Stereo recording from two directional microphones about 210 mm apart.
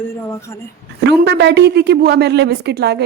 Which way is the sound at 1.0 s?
55° right (ahead or behind).